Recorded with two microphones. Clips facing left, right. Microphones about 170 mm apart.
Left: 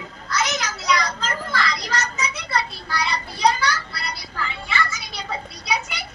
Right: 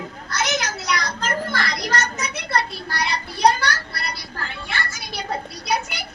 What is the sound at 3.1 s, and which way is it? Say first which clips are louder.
Speech: right 3 dB; 65° right (ahead or behind).